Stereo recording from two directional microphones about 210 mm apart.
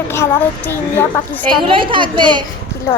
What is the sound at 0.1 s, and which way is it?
A child's voice, 10° left (ahead or behind).